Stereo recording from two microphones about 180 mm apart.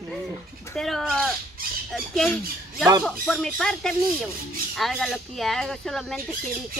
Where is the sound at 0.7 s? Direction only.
Centre (ahead or behind).